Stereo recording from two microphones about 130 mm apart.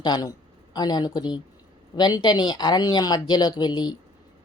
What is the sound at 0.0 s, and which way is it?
Speech, 30° left (ahead or behind).